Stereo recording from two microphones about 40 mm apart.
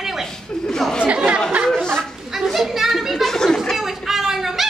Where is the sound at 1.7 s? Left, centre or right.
Centre.